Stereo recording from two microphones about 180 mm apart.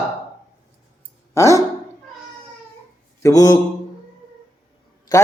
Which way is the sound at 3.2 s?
20° left (ahead or behind).